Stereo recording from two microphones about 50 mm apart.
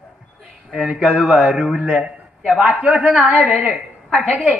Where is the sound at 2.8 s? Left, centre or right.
Right.